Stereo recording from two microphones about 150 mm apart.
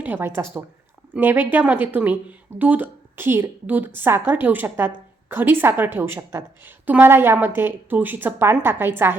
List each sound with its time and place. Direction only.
0.0 s a woman's voice: 15° right (ahead or behind)